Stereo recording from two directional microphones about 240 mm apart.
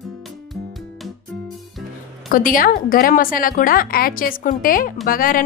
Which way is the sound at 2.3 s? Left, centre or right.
Left.